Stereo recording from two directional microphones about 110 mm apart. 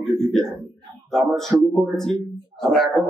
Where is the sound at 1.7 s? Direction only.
5° left (ahead or behind).